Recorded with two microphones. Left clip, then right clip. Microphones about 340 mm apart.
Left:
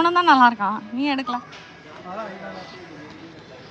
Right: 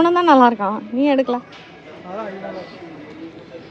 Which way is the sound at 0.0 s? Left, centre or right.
Centre.